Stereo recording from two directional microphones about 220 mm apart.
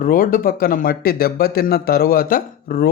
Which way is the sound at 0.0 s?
40° left (ahead or behind).